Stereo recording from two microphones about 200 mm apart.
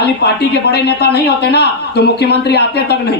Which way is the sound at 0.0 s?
55° left (ahead or behind).